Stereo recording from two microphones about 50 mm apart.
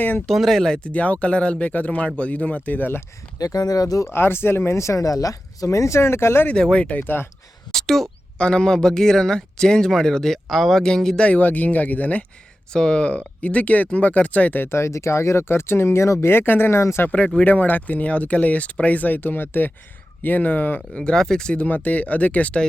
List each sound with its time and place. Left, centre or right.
0.3 s speech: centre
0.9 s speech: left
4.1 s speech: left
4.7 s speech: left
6.5 s speech: centre
7.7 s speech: centre
8.4 s speech: centre
11.2 s speech: left
12.7 s speech: centre
14.6 s speech: left
16.3 s speech: left
17.4 s speech: left
20.9 s speech: centre